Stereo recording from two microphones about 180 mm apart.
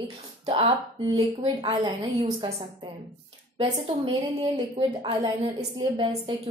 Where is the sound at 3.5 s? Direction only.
30° right (ahead or behind).